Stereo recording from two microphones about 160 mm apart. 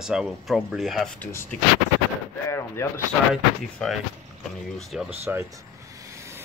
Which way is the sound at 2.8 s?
20° left (ahead or behind).